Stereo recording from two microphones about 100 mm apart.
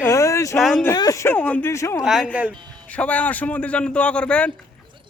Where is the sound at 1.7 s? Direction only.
30° left (ahead or behind).